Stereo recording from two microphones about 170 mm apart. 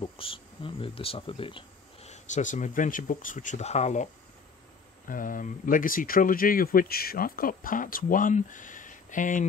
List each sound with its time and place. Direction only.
0.0 s speech: 30° left (ahead or behind)
5.0 s speech: 55° left (ahead or behind)